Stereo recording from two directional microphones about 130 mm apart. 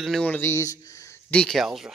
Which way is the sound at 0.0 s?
5° left (ahead or behind).